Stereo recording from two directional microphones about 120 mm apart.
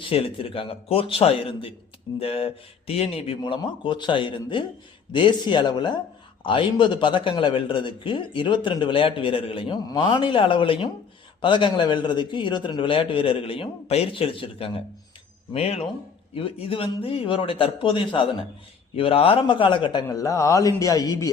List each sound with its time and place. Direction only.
0.0 s a man's voice: 50° left (ahead or behind)
16.3 s a man's voice: 50° left (ahead or behind); by 21.2 s 30° left (ahead or behind)